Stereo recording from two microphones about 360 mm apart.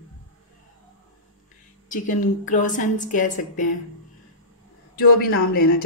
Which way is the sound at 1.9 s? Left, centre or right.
Left.